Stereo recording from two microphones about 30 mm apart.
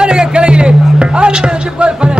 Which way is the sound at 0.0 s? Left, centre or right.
Right.